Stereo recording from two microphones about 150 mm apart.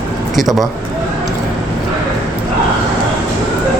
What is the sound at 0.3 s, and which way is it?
Speech, centre (ahead or behind).